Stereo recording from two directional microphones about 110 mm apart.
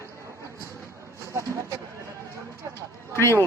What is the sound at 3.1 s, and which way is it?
Speech, 25° left (ahead or behind).